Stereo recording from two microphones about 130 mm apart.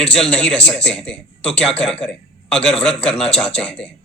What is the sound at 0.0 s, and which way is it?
A man's voice, 5° left (ahead or behind).